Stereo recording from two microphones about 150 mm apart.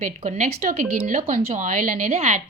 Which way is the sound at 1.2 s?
75° right (ahead or behind).